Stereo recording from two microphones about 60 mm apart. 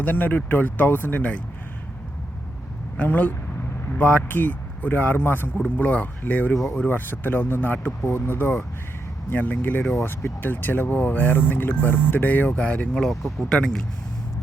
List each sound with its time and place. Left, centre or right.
0.0 s speech: left
3.0 s speech: left
5.6 s speech: left
6.5 s speech: centre
6.8 s speech: left
12.5 s speech: centre
13.0 s speech: centre